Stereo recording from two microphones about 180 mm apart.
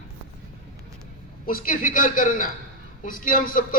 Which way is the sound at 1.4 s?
55° left (ahead or behind).